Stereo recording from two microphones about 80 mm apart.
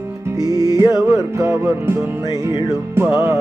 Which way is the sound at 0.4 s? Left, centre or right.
Left.